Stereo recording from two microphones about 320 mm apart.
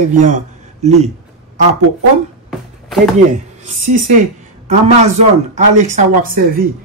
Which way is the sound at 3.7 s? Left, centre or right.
Right.